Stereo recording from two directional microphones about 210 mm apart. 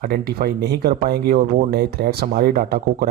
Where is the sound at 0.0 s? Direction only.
45° right (ahead or behind).